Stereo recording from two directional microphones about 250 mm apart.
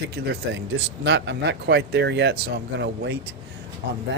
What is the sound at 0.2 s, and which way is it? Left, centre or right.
Speech, right.